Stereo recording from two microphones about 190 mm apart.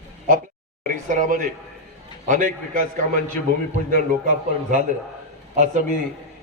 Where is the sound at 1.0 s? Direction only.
40° right (ahead or behind).